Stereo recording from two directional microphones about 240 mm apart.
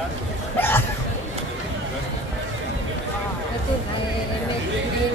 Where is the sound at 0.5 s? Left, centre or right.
Centre.